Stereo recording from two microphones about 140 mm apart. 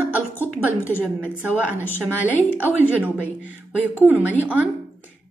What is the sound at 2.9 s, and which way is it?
Speech, 10° right (ahead or behind).